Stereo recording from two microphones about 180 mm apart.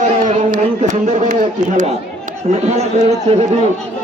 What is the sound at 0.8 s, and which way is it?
Speech, 40° right (ahead or behind).